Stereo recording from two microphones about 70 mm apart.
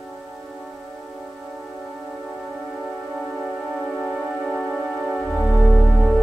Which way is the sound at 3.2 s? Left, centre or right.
Centre.